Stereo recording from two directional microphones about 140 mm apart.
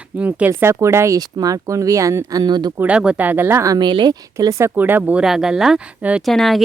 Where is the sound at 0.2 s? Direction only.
10° right (ahead or behind); by 2.7 s 30° right (ahead or behind).